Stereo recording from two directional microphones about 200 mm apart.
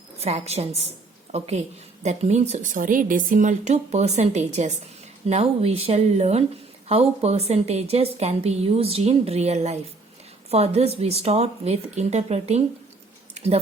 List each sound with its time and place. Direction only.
0.2 s a woman's voice: 30° right (ahead or behind)
13.3 s tick-tock: 30° right (ahead or behind)